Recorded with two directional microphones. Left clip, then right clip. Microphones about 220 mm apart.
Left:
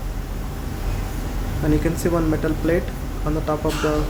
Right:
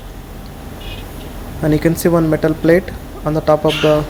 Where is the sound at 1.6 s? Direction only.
25° right (ahead or behind).